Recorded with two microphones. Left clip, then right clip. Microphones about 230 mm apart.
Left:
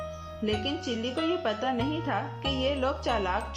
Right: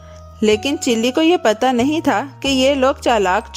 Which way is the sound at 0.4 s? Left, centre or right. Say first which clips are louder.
Right 15 dB; right.